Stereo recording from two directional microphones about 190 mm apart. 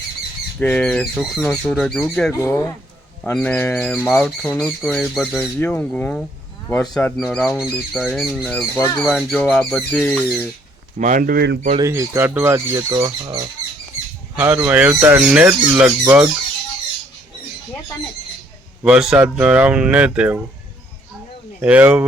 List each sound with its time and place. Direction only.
0.6 s speech: 5° left (ahead or behind)
2.3 s speech: 15° left (ahead or behind)
10.9 s speech: 45° right (ahead or behind); by 11.6 s 60° right (ahead or behind)
11.8 s speech: 15° right (ahead or behind)
14.3 s speech: 10° right (ahead or behind)
18.8 s speech: 5° right (ahead or behind)
21.6 s speech: 10° right (ahead or behind)